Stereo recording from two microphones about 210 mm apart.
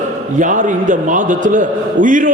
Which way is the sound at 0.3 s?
35° right (ahead or behind).